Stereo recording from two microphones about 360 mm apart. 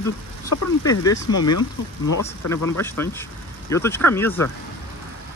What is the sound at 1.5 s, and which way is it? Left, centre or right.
Speech, left.